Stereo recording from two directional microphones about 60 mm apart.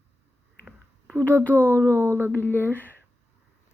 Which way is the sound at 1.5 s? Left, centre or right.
Right.